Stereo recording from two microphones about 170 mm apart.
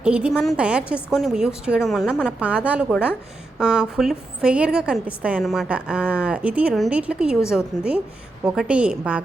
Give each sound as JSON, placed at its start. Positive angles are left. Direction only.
{"t": 0.0, "sound": "a woman's voice", "side_deg": -5}
{"t": 2.4, "sound": "a woman's voice", "side_deg": -5}